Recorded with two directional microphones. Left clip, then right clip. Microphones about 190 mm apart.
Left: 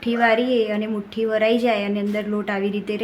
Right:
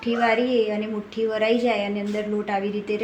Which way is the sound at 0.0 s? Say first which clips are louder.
Left 3 dB; 20° left (ahead or behind).